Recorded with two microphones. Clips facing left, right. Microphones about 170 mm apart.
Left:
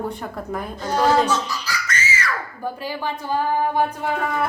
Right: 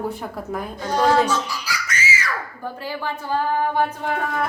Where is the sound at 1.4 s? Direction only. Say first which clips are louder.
Left 1 dB; 10° right (ahead or behind).